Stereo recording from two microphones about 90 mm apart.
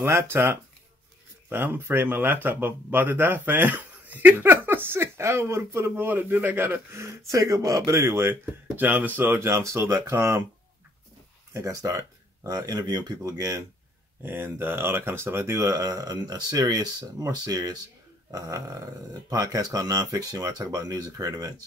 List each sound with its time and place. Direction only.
0.0 s speech: 30° right (ahead or behind)
11.5 s speech: 40° right (ahead or behind)
14.2 s speech: 25° right (ahead or behind); by 21.5 s 40° right (ahead or behind)